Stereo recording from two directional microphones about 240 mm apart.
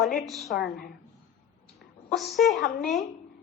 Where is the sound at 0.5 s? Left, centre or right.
Left.